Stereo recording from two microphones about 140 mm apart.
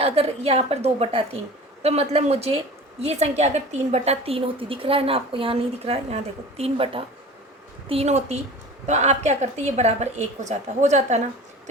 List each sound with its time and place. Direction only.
0.0 s a woman's voice: 45° right (ahead or behind)